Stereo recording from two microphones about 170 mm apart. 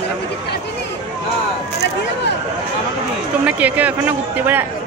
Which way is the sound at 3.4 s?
10° right (ahead or behind).